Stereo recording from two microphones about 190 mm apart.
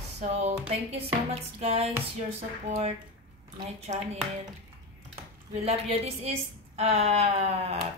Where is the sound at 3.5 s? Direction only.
35° right (ahead or behind).